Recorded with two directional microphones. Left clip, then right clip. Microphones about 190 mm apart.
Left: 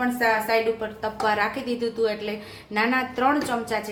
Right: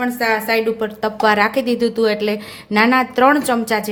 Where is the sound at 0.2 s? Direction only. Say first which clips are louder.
Right 4 dB; 55° right (ahead or behind).